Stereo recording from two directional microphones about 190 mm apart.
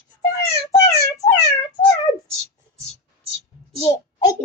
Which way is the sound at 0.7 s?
15° left (ahead or behind).